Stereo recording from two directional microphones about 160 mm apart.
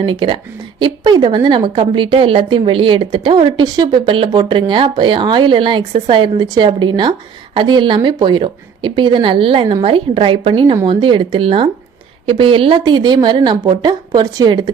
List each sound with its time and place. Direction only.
0.0 s a woman's voice: 30° right (ahead or behind)